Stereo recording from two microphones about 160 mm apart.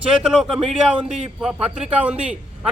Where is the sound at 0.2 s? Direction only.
5° right (ahead or behind).